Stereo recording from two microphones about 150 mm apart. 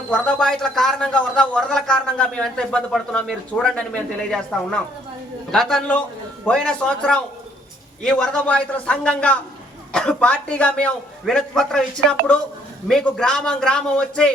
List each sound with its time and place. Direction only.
0.1 s a man's voice: 5° left (ahead or behind)